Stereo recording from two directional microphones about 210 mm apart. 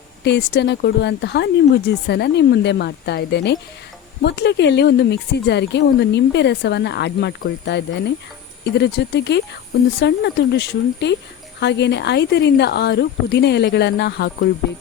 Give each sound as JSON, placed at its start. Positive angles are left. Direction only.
{"t": 0.3, "sound": "speech", "side_deg": 50}